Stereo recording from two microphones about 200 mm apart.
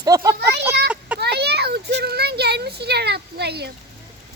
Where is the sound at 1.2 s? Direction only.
55° right (ahead or behind).